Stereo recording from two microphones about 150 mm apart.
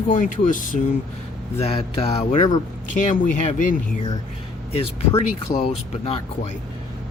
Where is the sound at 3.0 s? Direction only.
55° left (ahead or behind).